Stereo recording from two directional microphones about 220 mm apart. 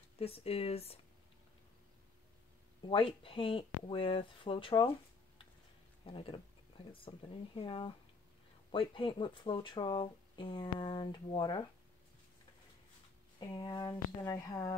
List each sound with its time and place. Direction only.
0.2 s speech: 25° left (ahead or behind)
2.8 s speech: 25° left (ahead or behind)
6.0 s speech: 25° left (ahead or behind)
13.4 s speech: 20° left (ahead or behind)